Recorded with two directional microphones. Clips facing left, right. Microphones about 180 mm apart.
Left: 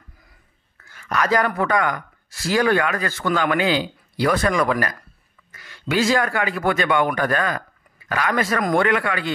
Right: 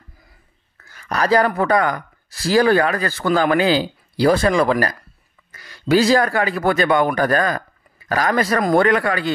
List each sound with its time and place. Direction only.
0.8 s speech: 40° right (ahead or behind)